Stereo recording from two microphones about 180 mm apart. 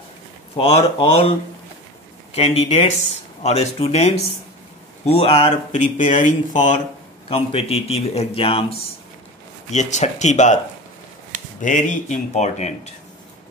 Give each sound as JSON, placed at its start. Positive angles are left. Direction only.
{"t": 0.6, "sound": "speech", "side_deg": 30}
{"t": 2.3, "sound": "speech", "side_deg": 35}
{"t": 7.2, "sound": "speech", "side_deg": 30}
{"t": 11.6, "sound": "speech", "side_deg": 45}